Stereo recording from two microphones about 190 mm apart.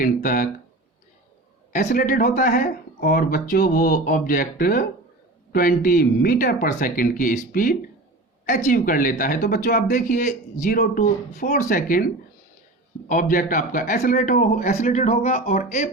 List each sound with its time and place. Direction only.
0.0 s speech: 45° left (ahead or behind)
1.7 s speech: 50° left (ahead or behind)
13.1 s speech: 45° left (ahead or behind)